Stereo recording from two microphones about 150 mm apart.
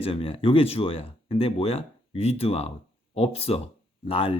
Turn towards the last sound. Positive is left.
turn(degrees=35)  # may be behind; listen again after turning